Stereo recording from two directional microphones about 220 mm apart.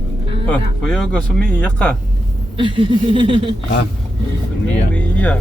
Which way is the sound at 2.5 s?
20° right (ahead or behind).